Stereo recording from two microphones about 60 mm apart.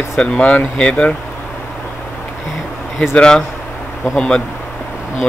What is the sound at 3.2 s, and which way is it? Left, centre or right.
Speech, centre.